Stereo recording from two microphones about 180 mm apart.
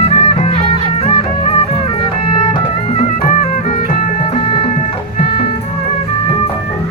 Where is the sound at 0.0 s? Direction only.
35° left (ahead or behind).